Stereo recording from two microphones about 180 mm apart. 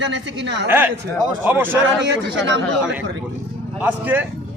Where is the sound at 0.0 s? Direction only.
75° right (ahead or behind).